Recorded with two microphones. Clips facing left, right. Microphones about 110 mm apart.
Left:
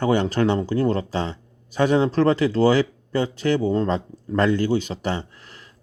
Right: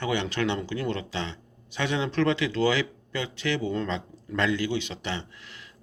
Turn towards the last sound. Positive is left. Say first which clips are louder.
# left 5 dB
turn(degrees=40)  # may be behind; listen again after turning